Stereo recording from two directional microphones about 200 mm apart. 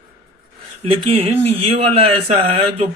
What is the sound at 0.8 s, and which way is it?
Speech, 30° right (ahead or behind).